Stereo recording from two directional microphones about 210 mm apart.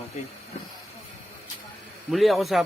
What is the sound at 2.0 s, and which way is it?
Speech, centre (ahead or behind).